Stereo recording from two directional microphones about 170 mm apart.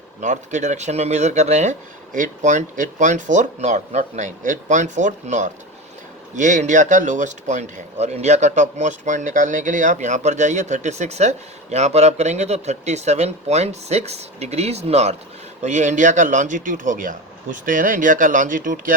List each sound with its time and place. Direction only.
0.2 s speech: 45° right (ahead or behind)